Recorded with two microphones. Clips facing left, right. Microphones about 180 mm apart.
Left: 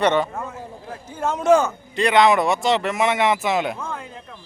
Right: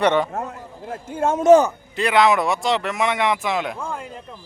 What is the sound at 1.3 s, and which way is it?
Speech, 45° right (ahead or behind).